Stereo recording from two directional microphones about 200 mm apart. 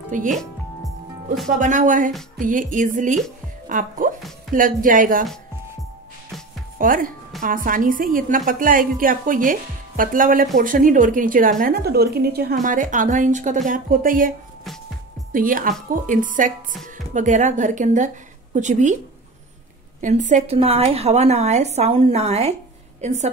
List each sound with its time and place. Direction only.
0.1 s a woman's voice: 40° right (ahead or behind)
0.4 s music: centre (ahead or behind)
1.6 s a woman's voice: 40° right (ahead or behind)
6.8 s a woman's voice: 45° right (ahead or behind)
12.6 s a woman's voice: 40° right (ahead or behind)
15.3 s a woman's voice: 45° right (ahead or behind)
20.0 s a woman's voice: 40° right (ahead or behind)